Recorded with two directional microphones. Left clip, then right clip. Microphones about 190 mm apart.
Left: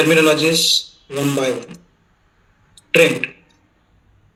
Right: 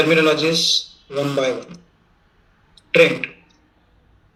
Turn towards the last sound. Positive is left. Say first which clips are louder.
# left 1 dB
turn(degrees=55)  # may be behind; listen again after turning